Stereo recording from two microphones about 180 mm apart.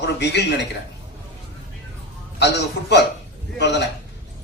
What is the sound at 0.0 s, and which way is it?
Speech, 70° left (ahead or behind).